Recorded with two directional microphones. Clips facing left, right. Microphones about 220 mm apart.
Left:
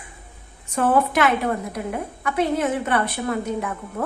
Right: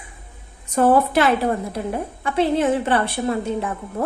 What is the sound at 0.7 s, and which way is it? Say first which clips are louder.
A woman's voice: right 3 dB; 35° right (ahead or behind).